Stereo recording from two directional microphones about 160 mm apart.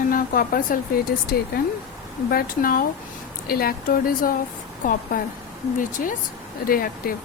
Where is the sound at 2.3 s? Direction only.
65° left (ahead or behind).